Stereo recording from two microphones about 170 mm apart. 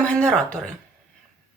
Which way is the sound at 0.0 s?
5° left (ahead or behind).